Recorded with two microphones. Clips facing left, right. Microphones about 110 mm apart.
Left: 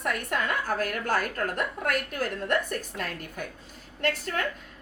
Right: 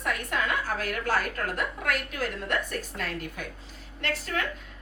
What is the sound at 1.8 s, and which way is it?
A woman's voice, 45° left (ahead or behind).